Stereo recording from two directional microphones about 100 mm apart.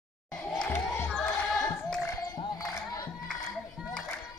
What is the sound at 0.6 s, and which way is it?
Crowd, 20° left (ahead or behind).